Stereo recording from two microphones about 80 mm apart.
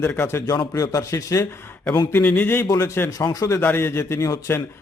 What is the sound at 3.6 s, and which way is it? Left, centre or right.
Speech, left.